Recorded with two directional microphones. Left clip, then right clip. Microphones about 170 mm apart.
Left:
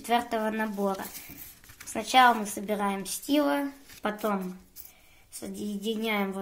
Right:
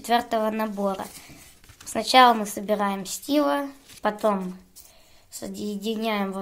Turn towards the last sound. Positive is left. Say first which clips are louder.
# right 3 dB
turn(degrees=-25)  # may be behind; listen again after turning